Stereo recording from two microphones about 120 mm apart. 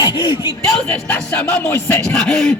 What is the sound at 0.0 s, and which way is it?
Speech, 35° left (ahead or behind).